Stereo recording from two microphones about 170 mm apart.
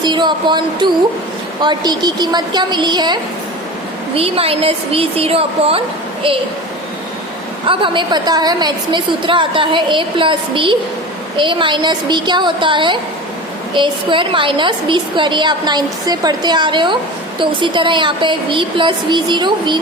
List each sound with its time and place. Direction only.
0.0 s a woman's voice: 25° right (ahead or behind)
7.7 s a woman's voice: 30° right (ahead or behind)